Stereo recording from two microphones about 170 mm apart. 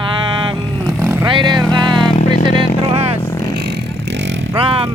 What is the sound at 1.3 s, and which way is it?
Speech, 25° right (ahead or behind).